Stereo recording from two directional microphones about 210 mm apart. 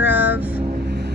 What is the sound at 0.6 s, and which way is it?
Vehicle, 45° right (ahead or behind).